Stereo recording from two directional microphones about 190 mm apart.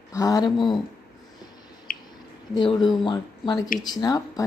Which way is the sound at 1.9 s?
45° left (ahead or behind).